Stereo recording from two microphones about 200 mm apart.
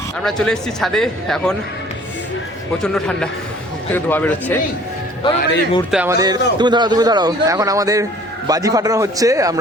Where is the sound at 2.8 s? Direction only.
5° left (ahead or behind).